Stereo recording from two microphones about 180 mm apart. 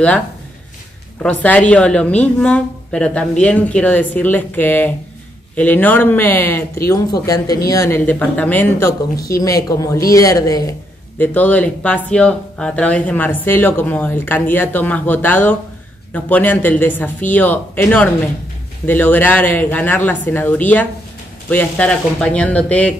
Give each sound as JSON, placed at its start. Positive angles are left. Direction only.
{"t": 1.2, "sound": "a woman's voice", "side_deg": 10}